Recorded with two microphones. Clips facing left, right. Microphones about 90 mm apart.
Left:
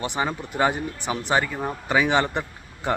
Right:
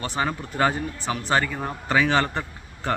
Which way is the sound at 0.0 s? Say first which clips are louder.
Even; 15° left (ahead or behind).